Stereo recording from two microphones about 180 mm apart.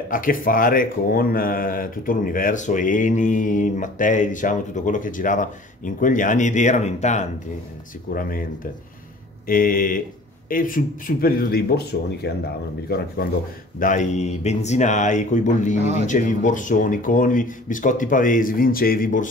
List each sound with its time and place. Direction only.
0.1 s speech: 50° left (ahead or behind)
8.1 s speech: 50° left (ahead or behind)
9.5 s a man's voice: 50° left (ahead or behind)
13.7 s speech: 45° left (ahead or behind)
15.8 s speech: 40° right (ahead or behind)
16.1 s speech: 45° left (ahead or behind)